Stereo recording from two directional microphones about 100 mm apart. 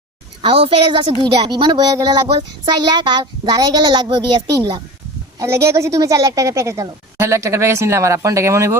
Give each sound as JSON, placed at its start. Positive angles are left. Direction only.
{"t": 0.4, "sound": "a woman's voice", "side_deg": -70}
{"t": 1.2, "sound": "a child's voice", "side_deg": -45}
{"t": 4.5, "sound": "a child's voice", "side_deg": -40}
{"t": 5.4, "sound": "a woman's voice", "side_deg": -25}